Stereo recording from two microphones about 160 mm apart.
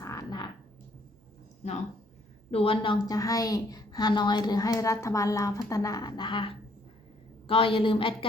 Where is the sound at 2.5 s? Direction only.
35° left (ahead or behind).